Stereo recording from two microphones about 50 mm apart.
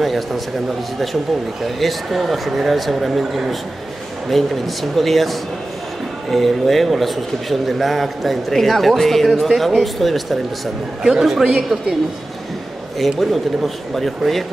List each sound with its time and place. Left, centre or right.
0.0 s speech: centre
1.6 s speech: centre
6.3 s speech: centre
13.0 s speech: centre